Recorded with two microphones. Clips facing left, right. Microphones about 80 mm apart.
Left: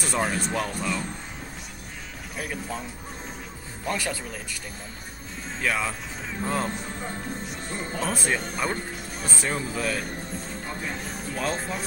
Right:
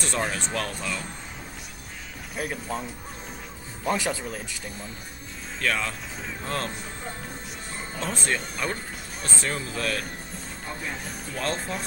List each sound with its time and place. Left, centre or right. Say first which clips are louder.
0.0 s speech: left 2 dB; centre
2.3 s speech: right 2 dB; centre
3.9 s speech: right 3 dB; centre
5.6 s speech: left 1 dB; centre
8.1 s speech: even; centre
11.1 s speech: left 1 dB; centre